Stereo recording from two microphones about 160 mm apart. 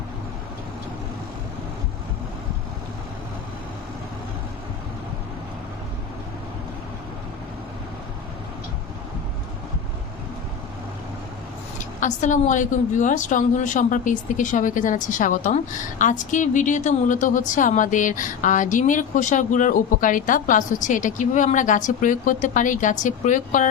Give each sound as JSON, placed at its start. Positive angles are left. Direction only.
{"t": 11.9, "sound": "a woman's voice", "side_deg": 50}